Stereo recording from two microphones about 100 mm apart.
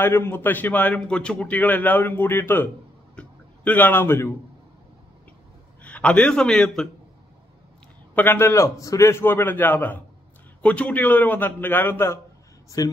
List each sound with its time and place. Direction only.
0.0 s a man's voice: 25° left (ahead or behind)
5.8 s a man's voice: 15° left (ahead or behind)
8.1 s a man's voice: 20° left (ahead or behind)
12.8 s speech: 35° left (ahead or behind)